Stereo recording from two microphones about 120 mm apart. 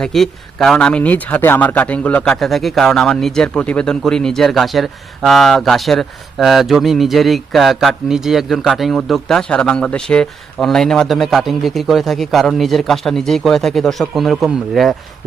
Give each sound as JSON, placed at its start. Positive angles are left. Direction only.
{"t": 0.0, "sound": "speech", "side_deg": 5}